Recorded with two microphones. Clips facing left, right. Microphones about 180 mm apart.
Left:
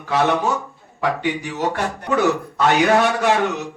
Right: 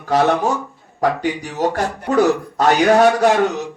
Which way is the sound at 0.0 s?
40° right (ahead or behind).